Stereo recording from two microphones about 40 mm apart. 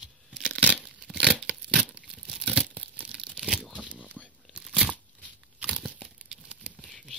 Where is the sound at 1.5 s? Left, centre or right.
Right.